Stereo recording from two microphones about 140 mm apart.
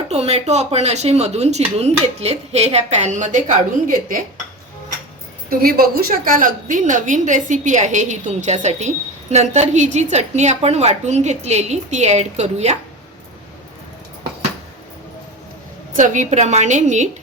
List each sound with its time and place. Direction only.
0.1 s speech: 50° right (ahead or behind); by 4.2 s 70° right (ahead or behind)
5.5 s a woman's voice: 90° right; by 12.7 s 50° right (ahead or behind)
16.0 s a woman's voice: 60° right (ahead or behind)